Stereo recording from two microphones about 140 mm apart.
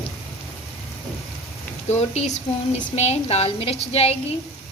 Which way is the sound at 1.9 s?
50° left (ahead or behind).